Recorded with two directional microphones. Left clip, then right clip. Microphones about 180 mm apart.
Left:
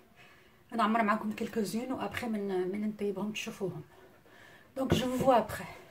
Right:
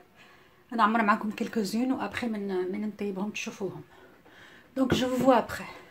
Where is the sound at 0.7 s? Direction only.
15° right (ahead or behind).